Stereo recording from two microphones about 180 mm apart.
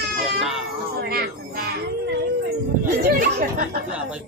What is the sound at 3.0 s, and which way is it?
Speech, 55° right (ahead or behind).